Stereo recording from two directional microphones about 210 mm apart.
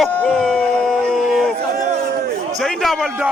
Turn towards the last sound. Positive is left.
turn(degrees=0)  # may be behind; listen again after turning